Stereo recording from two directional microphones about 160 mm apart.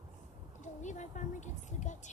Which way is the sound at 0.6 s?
50° left (ahead or behind).